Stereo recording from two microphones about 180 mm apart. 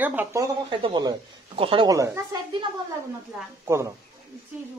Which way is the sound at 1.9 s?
20° right (ahead or behind).